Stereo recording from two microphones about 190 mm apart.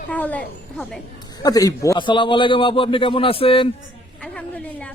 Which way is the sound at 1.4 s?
20° left (ahead or behind).